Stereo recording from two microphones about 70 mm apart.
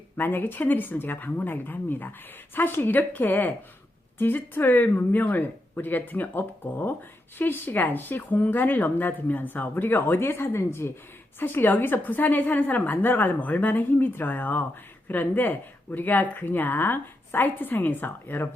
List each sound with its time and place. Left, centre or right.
0.2 s a woman's voice: left